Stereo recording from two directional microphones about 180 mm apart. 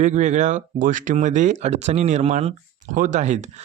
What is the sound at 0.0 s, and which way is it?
Speech, 40° right (ahead or behind).